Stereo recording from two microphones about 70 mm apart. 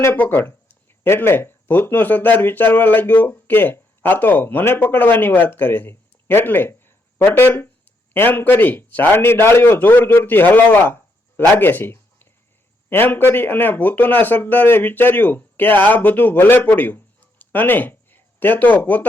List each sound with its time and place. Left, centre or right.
0.0 s a man's voice: left